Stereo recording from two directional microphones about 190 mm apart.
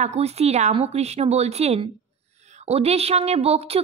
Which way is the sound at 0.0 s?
35° right (ahead or behind).